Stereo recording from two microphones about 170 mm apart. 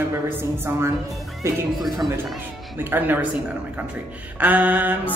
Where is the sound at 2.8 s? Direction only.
10° right (ahead or behind).